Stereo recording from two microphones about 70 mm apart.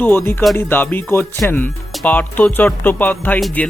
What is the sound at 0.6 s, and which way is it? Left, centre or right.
Music, left.